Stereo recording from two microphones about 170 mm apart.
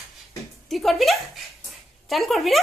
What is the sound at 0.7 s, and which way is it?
A woman's voice, centre (ahead or behind).